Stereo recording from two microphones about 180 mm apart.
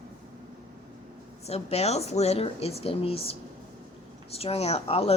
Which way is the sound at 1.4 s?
35° left (ahead or behind).